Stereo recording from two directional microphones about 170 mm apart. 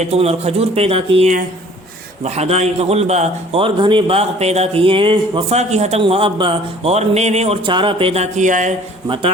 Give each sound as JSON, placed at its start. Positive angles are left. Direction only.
{"t": 0.0, "sound": "a man's voice", "side_deg": -40}
{"t": 9.0, "sound": "a man's voice", "side_deg": -30}